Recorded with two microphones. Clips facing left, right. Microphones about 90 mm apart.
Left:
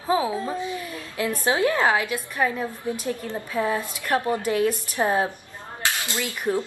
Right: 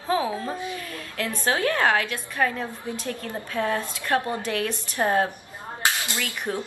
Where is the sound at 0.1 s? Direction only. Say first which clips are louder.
Left 1 dB; 20° left (ahead or behind).